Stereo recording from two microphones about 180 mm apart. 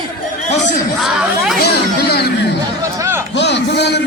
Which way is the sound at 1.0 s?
Centre (ahead or behind).